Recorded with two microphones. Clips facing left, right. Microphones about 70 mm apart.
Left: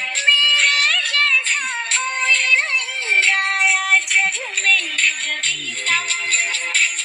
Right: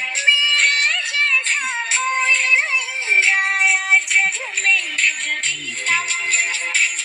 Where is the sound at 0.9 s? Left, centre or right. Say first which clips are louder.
Left 1 dB; right.